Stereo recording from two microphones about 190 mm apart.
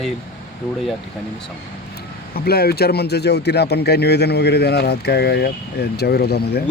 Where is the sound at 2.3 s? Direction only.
55° left (ahead or behind).